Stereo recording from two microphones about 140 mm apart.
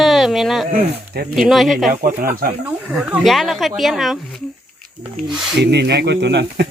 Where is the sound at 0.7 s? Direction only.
85° right.